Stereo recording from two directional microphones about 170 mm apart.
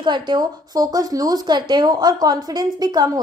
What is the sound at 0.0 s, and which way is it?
Speech, 25° right (ahead or behind).